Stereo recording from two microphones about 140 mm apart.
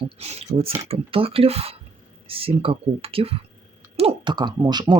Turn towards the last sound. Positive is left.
turn(degrees=-30)  # may be behind; listen again after turning